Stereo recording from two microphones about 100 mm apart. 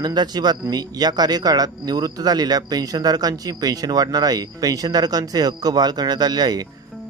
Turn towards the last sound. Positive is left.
turn(degrees=-45)  # may be behind; listen again after turning